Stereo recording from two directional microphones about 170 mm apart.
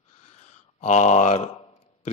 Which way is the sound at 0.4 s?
40° left (ahead or behind).